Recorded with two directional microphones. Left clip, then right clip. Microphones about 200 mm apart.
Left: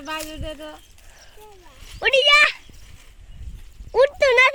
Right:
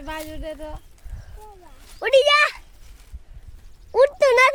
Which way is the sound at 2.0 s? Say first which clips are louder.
Left 1 dB; centre (ahead or behind).